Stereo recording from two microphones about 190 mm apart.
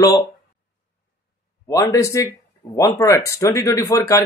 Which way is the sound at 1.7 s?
15° left (ahead or behind).